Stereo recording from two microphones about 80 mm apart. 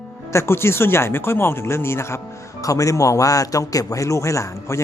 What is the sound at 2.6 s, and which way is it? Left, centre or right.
Speech, left.